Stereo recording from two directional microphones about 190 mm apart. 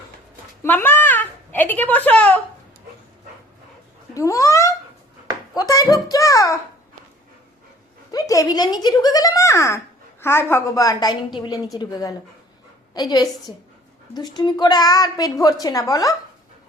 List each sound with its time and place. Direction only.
0.6 s a woman's voice: 10° left (ahead or behind)
4.1 s a child's voice: 15° left (ahead or behind)
8.1 s a woman's voice: 20° left (ahead or behind)